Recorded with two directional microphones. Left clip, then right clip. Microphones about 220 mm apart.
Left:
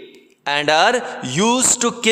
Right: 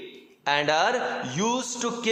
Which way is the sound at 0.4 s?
55° left (ahead or behind).